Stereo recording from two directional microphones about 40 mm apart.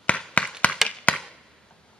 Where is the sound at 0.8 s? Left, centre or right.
Left.